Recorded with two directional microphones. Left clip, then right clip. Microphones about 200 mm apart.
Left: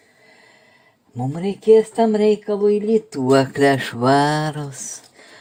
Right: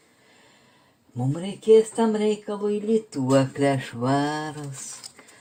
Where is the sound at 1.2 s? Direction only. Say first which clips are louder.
Left 6 dB; 45° left (ahead or behind).